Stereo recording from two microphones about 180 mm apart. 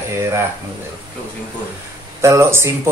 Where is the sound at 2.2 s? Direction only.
15° right (ahead or behind).